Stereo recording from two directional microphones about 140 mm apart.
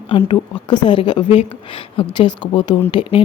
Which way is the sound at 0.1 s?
35° left (ahead or behind).